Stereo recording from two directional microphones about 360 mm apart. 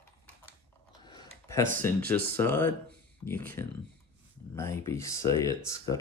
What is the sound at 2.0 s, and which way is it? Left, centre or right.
Speech, right.